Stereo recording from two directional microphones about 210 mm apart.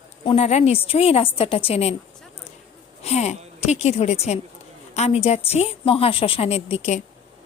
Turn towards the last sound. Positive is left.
turn(degrees=30)  # may be behind; listen again after turning